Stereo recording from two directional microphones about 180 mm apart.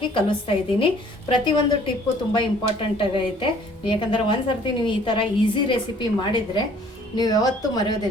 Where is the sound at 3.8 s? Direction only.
25° left (ahead or behind).